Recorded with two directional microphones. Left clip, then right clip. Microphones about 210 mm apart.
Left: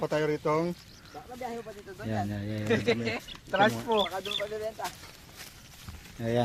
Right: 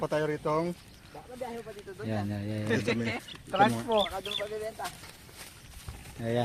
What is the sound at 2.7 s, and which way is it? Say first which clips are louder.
Speech: left 3 dB; 50° left (ahead or behind).